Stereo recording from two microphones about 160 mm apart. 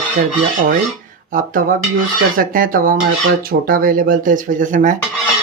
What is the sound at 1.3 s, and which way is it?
Speech, 60° right (ahead or behind).